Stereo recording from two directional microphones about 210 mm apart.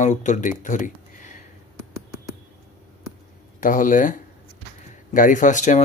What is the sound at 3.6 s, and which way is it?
Speech, 40° left (ahead or behind).